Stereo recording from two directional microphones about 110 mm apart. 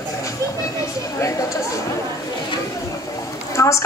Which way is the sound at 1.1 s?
30° left (ahead or behind).